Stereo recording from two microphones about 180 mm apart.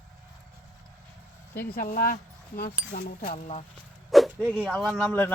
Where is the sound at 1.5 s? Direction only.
55° left (ahead or behind); by 3.6 s 40° left (ahead or behind).